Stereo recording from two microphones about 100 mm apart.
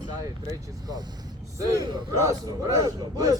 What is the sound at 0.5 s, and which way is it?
Speech, 40° right (ahead or behind).